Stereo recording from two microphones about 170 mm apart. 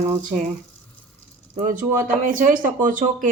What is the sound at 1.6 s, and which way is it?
Speech, 50° right (ahead or behind).